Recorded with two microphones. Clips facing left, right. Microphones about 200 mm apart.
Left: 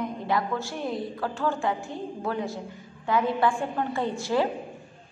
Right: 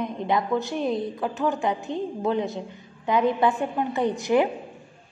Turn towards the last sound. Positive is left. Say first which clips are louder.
# right 4 dB
turn(degrees=-20)  # may be behind; listen again after turning